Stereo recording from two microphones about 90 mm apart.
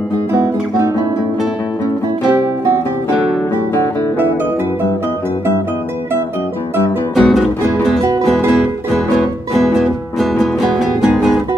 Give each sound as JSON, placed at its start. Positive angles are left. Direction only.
{"t": 0.3, "sound": "guitar", "side_deg": -35}
{"t": 7.2, "sound": "music", "side_deg": 5}
{"t": 9.1, "sound": "music", "side_deg": 0}